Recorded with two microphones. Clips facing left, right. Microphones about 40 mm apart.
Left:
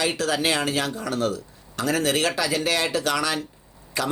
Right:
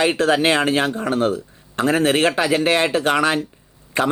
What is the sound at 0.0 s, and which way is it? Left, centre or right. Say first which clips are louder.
Speech: right 7 dB; right.